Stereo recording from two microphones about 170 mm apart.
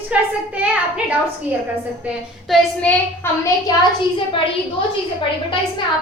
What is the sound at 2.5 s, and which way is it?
Speech, 10° left (ahead or behind).